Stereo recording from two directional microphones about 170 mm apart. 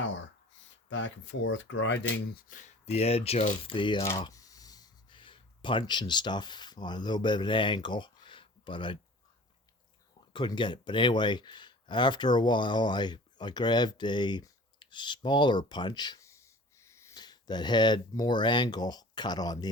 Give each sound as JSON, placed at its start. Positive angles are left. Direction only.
{"t": 0.9, "sound": "speech", "side_deg": 90}
{"t": 2.5, "sound": "speech", "side_deg": 45}
{"t": 4.0, "sound": "speech", "side_deg": 20}
{"t": 10.3, "sound": "speech", "side_deg": 30}